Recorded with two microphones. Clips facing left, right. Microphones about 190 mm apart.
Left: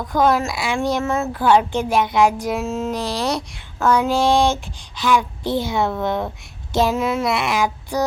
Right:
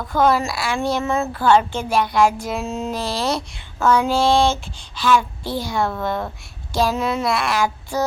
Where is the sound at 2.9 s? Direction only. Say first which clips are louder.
Even; 15° left (ahead or behind).